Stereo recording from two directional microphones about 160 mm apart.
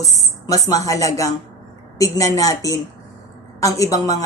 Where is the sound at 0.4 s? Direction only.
20° left (ahead or behind).